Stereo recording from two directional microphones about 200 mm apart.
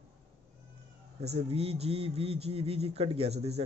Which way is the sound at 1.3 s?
30° right (ahead or behind).